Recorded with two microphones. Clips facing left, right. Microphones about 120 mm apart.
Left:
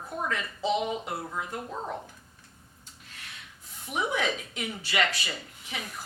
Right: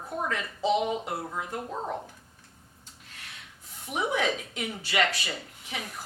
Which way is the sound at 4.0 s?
50° right (ahead or behind).